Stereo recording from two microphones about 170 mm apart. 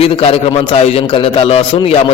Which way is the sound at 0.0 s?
35° left (ahead or behind).